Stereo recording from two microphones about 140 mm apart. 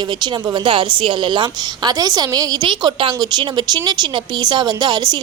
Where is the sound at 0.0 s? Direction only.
30° right (ahead or behind).